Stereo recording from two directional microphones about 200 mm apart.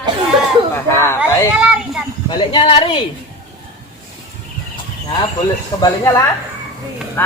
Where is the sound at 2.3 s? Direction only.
25° left (ahead or behind).